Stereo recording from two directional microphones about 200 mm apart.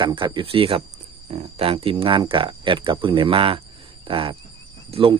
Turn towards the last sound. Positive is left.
turn(degrees=-25)  # may be behind; listen again after turning